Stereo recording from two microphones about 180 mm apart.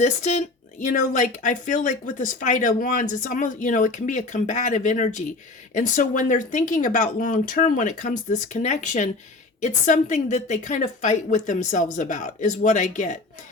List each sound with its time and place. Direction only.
0.0 s a woman's voice: 40° left (ahead or behind)